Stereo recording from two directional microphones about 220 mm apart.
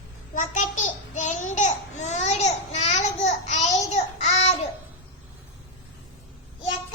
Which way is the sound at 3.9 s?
30° left (ahead or behind).